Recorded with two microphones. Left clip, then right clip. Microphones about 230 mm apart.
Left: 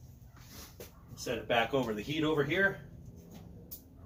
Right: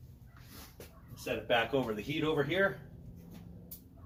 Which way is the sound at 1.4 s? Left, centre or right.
Centre.